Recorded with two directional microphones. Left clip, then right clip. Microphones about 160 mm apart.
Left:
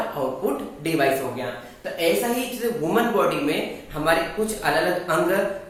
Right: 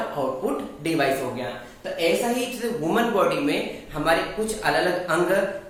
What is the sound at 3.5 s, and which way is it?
Speech, 15° right (ahead or behind).